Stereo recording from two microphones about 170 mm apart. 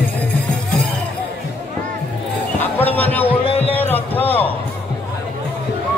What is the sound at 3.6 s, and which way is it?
Music, 10° left (ahead or behind).